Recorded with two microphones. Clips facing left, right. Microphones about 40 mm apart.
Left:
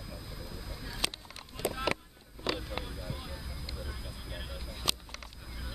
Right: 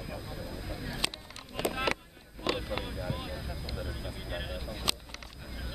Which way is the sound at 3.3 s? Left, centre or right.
Centre.